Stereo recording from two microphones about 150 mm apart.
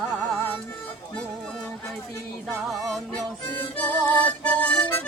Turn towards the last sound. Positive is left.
turn(degrees=10)  # may be behind; listen again after turning